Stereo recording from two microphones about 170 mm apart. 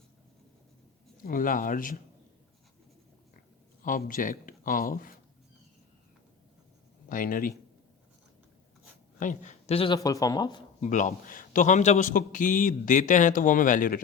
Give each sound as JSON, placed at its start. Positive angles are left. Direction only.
{"t": 1.2, "sound": "a man's voice", "side_deg": 55}
{"t": 3.8, "sound": "a man's voice", "side_deg": 50}
{"t": 7.1, "sound": "speech", "side_deg": 55}
{"t": 9.1, "sound": "a man's voice", "side_deg": 45}
{"t": 10.0, "sound": "speech", "side_deg": 20}
{"t": 10.8, "sound": "a man's voice", "side_deg": 45}